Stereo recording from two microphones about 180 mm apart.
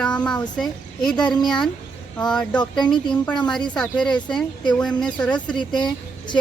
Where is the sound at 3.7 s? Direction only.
5° left (ahead or behind).